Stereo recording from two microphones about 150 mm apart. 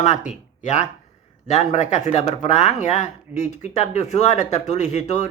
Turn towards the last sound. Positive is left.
turn(degrees=50)  # may be behind; listen again after turning